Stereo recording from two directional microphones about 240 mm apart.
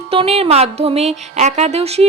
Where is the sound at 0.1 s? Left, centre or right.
Right.